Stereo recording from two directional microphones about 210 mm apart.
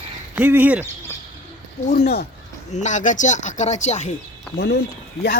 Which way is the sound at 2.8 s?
35° left (ahead or behind).